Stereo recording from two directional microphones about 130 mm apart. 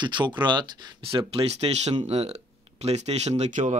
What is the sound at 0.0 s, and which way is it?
Speech, 35° right (ahead or behind).